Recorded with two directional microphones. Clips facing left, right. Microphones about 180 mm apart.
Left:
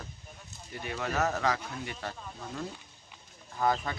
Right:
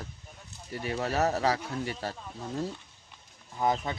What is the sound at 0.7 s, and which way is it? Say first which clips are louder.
Speech: right 3 dB; 35° right (ahead or behind).